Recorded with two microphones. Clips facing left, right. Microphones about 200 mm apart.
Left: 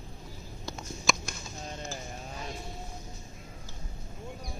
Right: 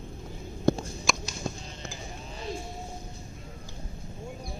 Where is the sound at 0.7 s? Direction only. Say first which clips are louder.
Right 17 dB; 55° right (ahead or behind).